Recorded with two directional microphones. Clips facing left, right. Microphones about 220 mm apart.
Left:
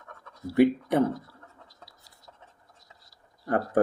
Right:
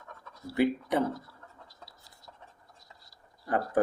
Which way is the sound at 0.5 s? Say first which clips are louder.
Left 5 dB; 55° left (ahead or behind).